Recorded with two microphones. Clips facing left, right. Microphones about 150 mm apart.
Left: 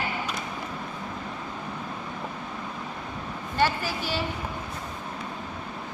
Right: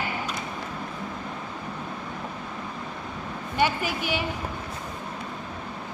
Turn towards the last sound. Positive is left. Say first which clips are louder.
# right 2 dB
turn(degrees=-15)  # may be behind; listen again after turning